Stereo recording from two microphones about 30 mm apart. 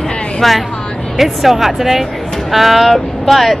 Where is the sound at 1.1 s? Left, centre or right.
Centre.